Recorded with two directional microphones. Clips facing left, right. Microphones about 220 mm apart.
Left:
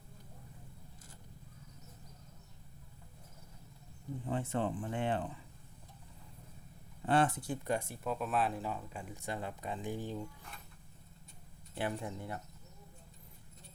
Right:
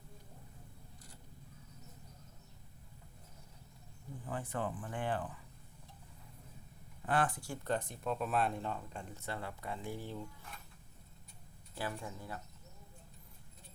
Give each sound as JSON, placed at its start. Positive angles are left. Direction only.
{"t": 4.3, "sound": "speech", "side_deg": 25}
{"t": 7.0, "sound": "speech", "side_deg": 25}
{"t": 11.7, "sound": "speech", "side_deg": 20}